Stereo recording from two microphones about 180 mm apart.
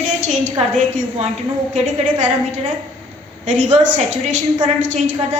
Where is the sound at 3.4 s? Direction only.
45° right (ahead or behind).